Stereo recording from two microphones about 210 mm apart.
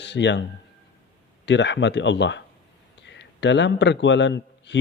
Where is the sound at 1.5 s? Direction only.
55° left (ahead or behind).